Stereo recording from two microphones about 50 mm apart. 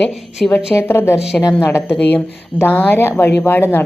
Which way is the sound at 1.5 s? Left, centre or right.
Left.